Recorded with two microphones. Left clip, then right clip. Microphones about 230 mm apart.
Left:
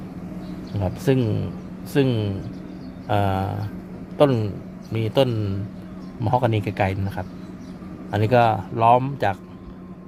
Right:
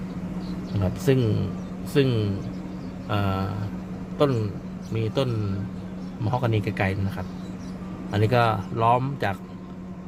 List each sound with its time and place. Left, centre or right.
0.8 s a man's voice: centre
8.1 s speech: centre